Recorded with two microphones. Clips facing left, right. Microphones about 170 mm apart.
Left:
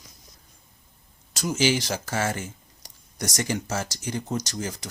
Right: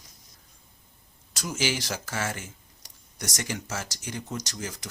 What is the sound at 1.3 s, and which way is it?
Speech, 25° left (ahead or behind).